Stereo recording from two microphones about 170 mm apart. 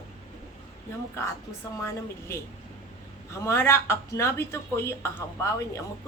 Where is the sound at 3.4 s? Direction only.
15° left (ahead or behind).